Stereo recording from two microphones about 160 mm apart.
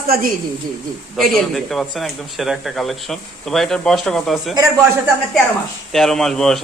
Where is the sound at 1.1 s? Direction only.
Centre (ahead or behind).